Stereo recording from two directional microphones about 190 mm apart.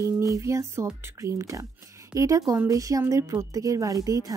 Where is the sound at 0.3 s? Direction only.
15° right (ahead or behind).